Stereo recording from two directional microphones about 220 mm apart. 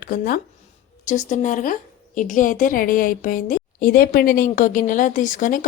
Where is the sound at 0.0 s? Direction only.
40° left (ahead or behind).